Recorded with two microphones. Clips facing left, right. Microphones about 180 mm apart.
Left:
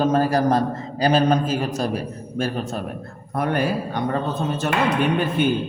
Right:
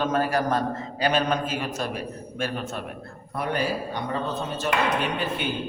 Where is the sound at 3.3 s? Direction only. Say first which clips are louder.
Left 5 dB; 50° left (ahead or behind).